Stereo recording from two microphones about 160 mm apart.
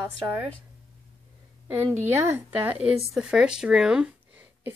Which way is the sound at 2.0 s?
15° right (ahead or behind).